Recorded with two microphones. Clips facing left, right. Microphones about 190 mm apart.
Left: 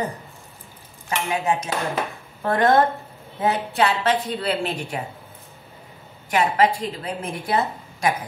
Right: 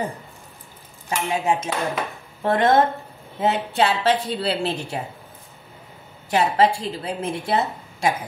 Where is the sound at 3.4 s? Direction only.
25° right (ahead or behind).